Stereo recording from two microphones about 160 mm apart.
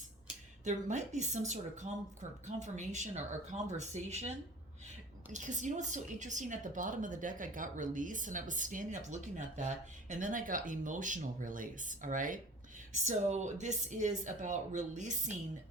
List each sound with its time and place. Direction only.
0.6 s a woman's voice: 50° right (ahead or behind)
5.3 s a woman's voice: 50° right (ahead or behind)